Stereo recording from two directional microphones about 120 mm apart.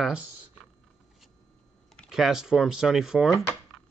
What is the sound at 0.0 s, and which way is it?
Speech, 10° right (ahead or behind).